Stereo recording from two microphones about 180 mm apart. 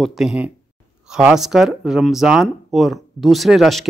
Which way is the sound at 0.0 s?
Centre (ahead or behind).